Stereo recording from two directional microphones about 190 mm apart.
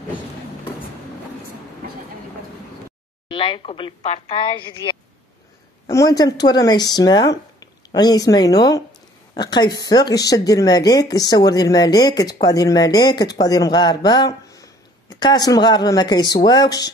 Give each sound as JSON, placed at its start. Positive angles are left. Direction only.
{"t": 3.3, "sound": "a woman's voice", "side_deg": 25}